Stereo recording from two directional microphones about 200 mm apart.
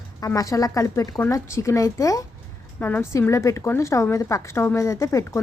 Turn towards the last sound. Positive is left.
turn(degrees=15)  # may be behind; listen again after turning